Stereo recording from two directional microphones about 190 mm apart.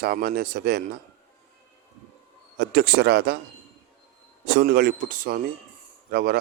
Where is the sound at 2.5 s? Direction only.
55° right (ahead or behind).